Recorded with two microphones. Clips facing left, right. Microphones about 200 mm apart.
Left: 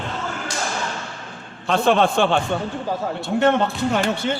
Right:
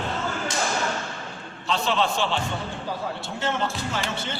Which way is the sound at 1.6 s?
55° left (ahead or behind).